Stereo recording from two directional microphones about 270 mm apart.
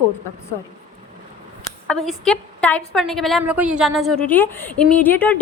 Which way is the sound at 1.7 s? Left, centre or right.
Centre.